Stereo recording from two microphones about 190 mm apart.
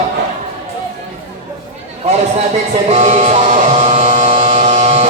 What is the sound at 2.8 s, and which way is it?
Electric shaver, 35° right (ahead or behind).